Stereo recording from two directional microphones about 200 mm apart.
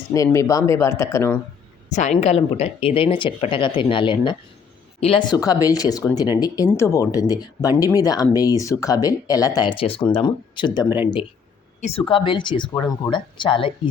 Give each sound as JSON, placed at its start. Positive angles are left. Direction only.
{"t": 0.3, "sound": "speech", "side_deg": 15}
{"t": 1.9, "sound": "speech", "side_deg": 35}
{"t": 10.8, "sound": "speech", "side_deg": -10}
{"t": 11.8, "sound": "speech", "side_deg": 30}